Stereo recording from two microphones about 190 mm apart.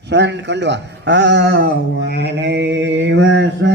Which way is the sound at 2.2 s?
65° right (ahead or behind).